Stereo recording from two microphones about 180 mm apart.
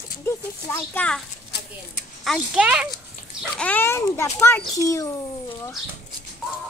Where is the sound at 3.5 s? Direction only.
10° left (ahead or behind).